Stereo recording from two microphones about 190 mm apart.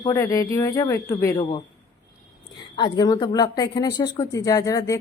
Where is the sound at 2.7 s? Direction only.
20° left (ahead or behind).